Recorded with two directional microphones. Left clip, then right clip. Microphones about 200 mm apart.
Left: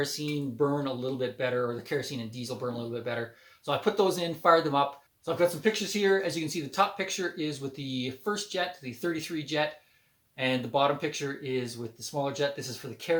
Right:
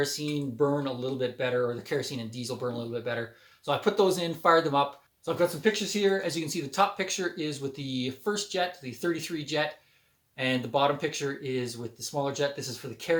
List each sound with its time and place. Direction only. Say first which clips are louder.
0.0 s speech: right 2 dB; 5° right (ahead or behind)